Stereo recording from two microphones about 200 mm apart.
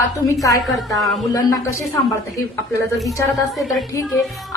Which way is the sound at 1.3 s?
15° left (ahead or behind).